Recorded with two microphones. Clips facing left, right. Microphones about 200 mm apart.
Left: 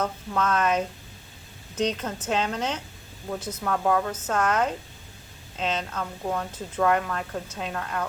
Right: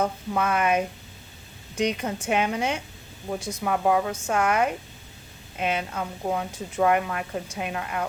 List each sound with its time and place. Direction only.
0.0 s speech: 10° right (ahead or behind)